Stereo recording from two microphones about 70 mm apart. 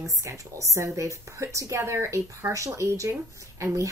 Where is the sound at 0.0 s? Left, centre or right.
Right.